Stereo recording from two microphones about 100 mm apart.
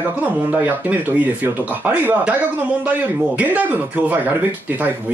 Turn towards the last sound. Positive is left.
turn(degrees=-15)  # may be behind; listen again after turning